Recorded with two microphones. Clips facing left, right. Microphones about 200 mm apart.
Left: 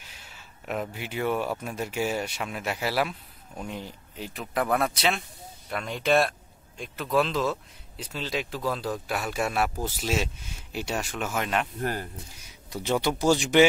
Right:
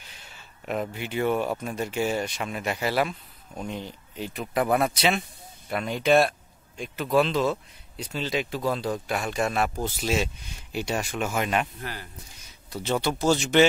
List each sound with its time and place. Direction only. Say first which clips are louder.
0.0 s speech: right 1 dB; 5° left (ahead or behind)
11.8 s speech: left 7 dB; 45° left (ahead or behind)
12.6 s speech: even; 15° left (ahead or behind)